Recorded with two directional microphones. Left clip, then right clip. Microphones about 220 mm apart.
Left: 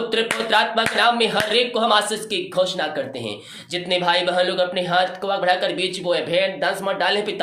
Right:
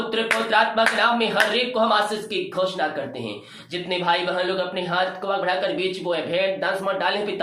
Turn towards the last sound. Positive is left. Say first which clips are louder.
# left 2 dB
turn(degrees=45)  # may be behind; listen again after turning